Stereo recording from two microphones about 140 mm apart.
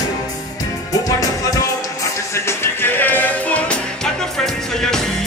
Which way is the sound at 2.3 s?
20° left (ahead or behind).